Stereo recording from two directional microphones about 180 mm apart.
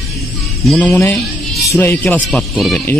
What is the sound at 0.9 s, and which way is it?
Speech, 15° left (ahead or behind).